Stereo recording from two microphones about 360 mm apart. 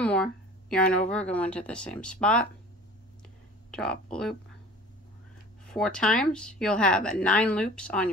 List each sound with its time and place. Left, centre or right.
0.0 s a sound: centre
1.1 s speech: centre
3.7 s speech: centre
5.7 s speech: centre